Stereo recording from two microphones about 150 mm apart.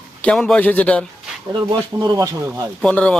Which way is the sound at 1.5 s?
25° right (ahead or behind).